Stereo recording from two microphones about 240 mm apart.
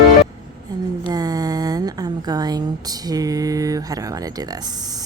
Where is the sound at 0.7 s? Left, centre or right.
Centre.